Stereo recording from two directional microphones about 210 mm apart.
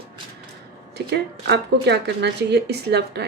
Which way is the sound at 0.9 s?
50° right (ahead or behind).